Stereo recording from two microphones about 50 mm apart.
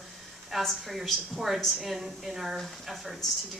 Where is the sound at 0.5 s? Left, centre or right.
Centre.